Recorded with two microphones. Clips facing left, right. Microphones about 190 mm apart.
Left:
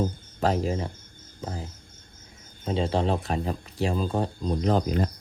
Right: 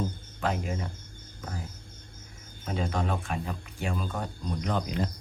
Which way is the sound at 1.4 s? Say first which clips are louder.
Left 5 dB; 30° left (ahead or behind).